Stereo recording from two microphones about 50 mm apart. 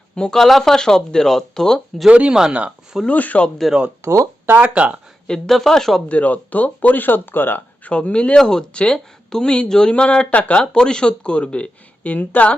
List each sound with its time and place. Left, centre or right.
0.2 s speech: centre
2.0 s speech: right
2.3 s speech: centre
3.1 s speech: left
3.6 s speech: centre
4.0 s speech: right
4.4 s speech: right
4.7 s speech: right
5.5 s speech: centre
6.1 s speech: left
7.9 s speech: left
8.4 s speech: centre; by 12.5 s left